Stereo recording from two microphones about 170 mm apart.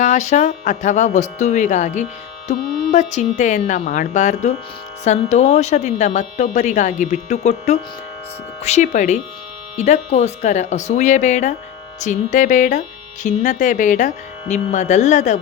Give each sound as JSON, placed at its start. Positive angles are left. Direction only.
{"t": 0.0, "sound": "speech", "side_deg": 45}